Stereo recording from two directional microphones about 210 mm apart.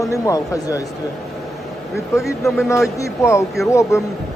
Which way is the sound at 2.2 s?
Centre (ahead or behind).